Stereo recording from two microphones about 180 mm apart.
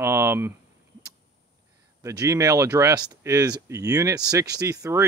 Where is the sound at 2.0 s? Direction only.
20° right (ahead or behind).